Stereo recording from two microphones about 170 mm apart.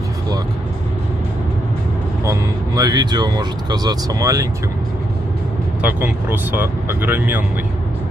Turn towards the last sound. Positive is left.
turn(degrees=-10)  # may be behind; listen again after turning